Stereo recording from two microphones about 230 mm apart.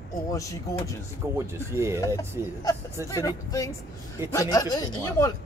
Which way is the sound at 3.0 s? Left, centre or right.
Centre.